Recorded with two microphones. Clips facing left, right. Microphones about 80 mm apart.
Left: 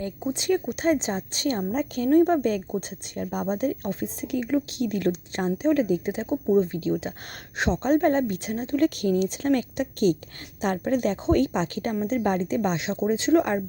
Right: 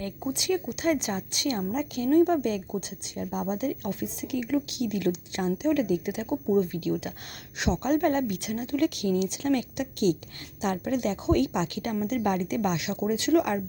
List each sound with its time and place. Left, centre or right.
0.3 s speech: left
0.9 s speech: left